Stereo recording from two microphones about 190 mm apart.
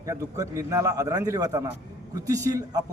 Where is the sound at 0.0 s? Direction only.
15° right (ahead or behind).